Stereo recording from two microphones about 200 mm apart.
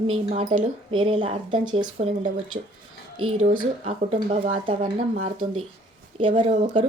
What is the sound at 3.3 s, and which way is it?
Speech, 35° right (ahead or behind).